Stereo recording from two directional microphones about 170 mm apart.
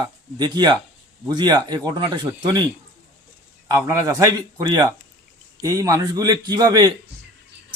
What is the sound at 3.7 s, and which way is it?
A man's voice, 20° right (ahead or behind).